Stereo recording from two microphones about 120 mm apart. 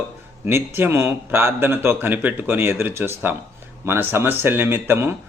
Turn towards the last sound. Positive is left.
turn(degrees=-20)  # may be behind; listen again after turning